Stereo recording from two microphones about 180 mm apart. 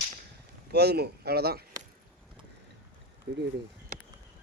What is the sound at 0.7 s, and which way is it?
Speech, 65° right (ahead or behind).